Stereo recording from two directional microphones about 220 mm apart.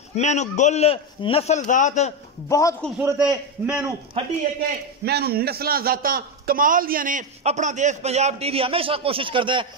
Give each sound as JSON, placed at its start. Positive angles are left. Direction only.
{"t": 0.1, "sound": "a man's voice", "side_deg": 30}
{"t": 2.5, "sound": "a man's voice", "side_deg": 15}
{"t": 3.0, "sound": "a man's voice", "side_deg": -10}
{"t": 5.0, "sound": "a man's voice", "side_deg": -45}